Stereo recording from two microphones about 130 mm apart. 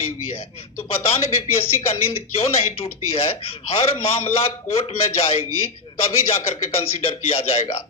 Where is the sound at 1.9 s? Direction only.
50° left (ahead or behind).